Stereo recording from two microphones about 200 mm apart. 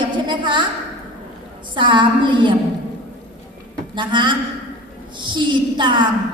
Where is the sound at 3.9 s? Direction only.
25° right (ahead or behind).